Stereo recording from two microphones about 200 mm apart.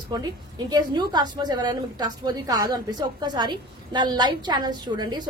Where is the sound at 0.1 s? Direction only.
20° right (ahead or behind).